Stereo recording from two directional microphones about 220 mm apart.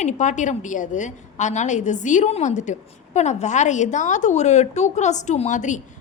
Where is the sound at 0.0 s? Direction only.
35° left (ahead or behind).